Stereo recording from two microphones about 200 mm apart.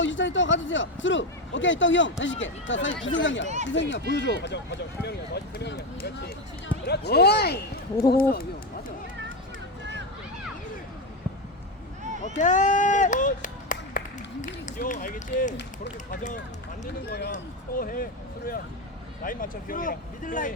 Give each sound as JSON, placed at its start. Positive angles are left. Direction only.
{"t": 0.0, "sound": "a man's voice", "side_deg": 65}
{"t": 12.4, "sound": "speech", "side_deg": 40}
{"t": 17.1, "sound": "speech", "side_deg": 55}
{"t": 17.3, "sound": "speech", "side_deg": 45}